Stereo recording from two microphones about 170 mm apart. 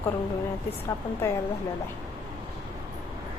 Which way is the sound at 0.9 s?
15° left (ahead or behind).